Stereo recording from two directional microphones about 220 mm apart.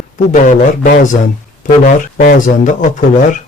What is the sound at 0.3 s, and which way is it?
Speech, 35° left (ahead or behind).